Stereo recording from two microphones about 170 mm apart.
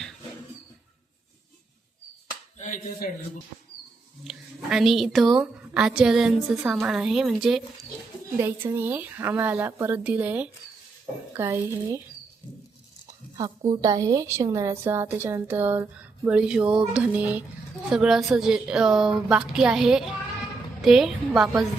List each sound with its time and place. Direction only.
2.6 s speech: 50° left (ahead or behind)
4.2 s a woman's voice: centre (ahead or behind)
8.4 s a woman's voice: 15° right (ahead or behind)
13.3 s a woman's voice: 25° right (ahead or behind); by 21.7 s centre (ahead or behind)